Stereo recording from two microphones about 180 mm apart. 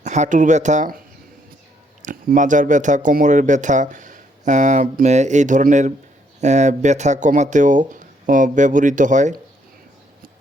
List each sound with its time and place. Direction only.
0.0 s speech: 40° right (ahead or behind)
2.0 s speech: 45° right (ahead or behind)